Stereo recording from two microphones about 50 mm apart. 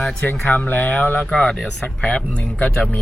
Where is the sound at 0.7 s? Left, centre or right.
Left.